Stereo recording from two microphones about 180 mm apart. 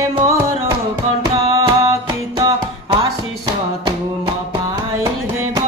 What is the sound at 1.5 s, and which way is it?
Music, 20° right (ahead or behind).